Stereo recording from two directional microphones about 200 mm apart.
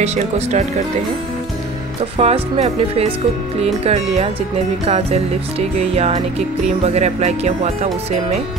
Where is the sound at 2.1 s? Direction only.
30° right (ahead or behind).